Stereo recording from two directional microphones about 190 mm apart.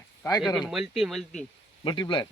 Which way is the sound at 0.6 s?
Centre (ahead or behind).